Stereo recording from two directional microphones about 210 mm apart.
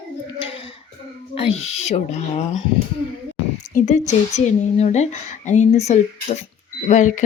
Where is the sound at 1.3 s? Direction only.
30° left (ahead or behind).